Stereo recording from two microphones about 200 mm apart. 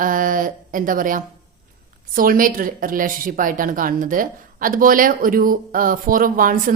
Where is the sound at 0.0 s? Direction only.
45° right (ahead or behind).